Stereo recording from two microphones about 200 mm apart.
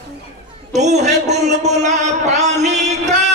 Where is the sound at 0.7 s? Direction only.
35° right (ahead or behind).